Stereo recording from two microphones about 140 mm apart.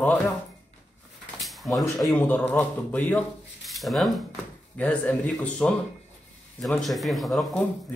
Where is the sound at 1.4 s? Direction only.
Centre (ahead or behind).